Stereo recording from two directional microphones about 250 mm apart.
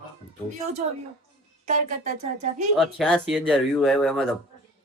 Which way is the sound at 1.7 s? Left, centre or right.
Right.